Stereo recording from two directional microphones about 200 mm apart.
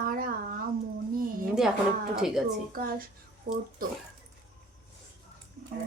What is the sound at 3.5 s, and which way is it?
Speech, 50° right (ahead or behind).